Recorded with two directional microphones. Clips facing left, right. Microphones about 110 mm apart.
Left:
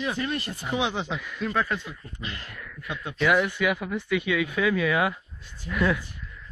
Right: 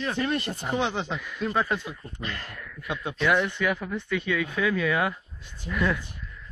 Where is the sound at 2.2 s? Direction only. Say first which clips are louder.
Right 2 dB; 50° right (ahead or behind).